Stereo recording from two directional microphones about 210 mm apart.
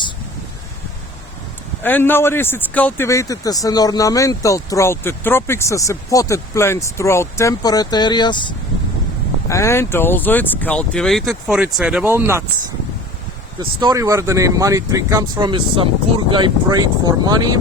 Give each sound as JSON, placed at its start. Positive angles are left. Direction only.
{"t": 1.8, "sound": "a man's voice", "side_deg": 10}
{"t": 13.6, "sound": "speech", "side_deg": -20}